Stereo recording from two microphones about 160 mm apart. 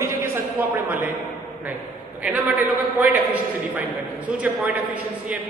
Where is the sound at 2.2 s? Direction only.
10° right (ahead or behind).